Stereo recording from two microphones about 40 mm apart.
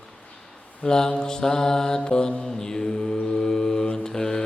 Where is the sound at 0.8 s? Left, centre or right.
Centre.